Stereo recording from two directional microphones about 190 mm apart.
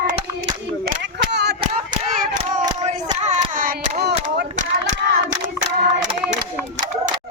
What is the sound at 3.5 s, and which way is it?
Hands, 50° right (ahead or behind).